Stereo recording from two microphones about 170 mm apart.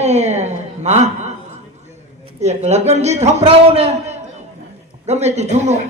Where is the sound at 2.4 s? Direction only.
40° right (ahead or behind).